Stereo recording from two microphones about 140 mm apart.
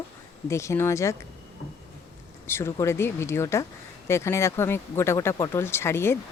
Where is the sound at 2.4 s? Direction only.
15° left (ahead or behind).